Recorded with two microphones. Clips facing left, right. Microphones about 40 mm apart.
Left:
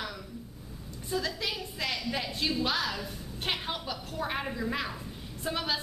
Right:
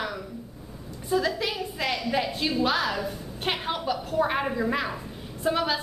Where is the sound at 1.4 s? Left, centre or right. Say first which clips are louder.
Right 5 dB; centre.